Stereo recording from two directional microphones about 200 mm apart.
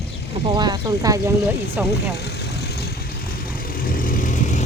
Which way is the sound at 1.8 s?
5° right (ahead or behind).